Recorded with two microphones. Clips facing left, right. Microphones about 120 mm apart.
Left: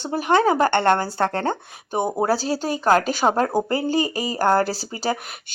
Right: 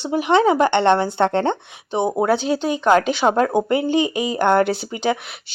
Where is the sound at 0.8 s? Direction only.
25° right (ahead or behind).